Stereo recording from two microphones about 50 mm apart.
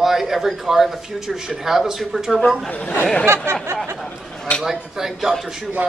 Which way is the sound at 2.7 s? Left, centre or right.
Left.